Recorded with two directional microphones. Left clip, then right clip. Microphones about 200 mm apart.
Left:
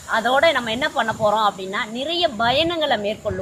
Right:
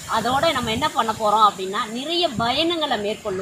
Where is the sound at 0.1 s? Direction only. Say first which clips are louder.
Left 3 dB; 10° left (ahead or behind).